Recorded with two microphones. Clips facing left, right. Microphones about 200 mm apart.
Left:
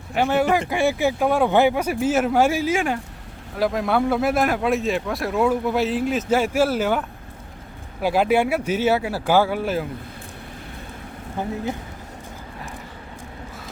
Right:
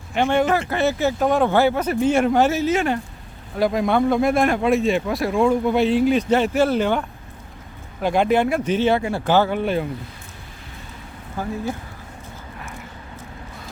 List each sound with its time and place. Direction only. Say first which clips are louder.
0.1 s speech: right 1 dB; 5° left (ahead or behind)
8.0 s speech: right 1 dB; 5° left (ahead or behind)
11.4 s speech: even; 20° left (ahead or behind)